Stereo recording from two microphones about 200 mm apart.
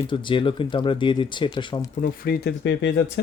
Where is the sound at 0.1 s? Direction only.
25° left (ahead or behind).